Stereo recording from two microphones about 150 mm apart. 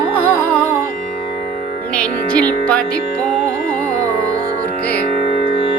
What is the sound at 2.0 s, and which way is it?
Speech, 10° left (ahead or behind).